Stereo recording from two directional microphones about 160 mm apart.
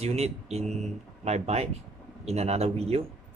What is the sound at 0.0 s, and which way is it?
Speech, 40° right (ahead or behind).